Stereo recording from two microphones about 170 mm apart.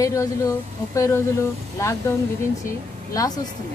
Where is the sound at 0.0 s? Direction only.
20° left (ahead or behind).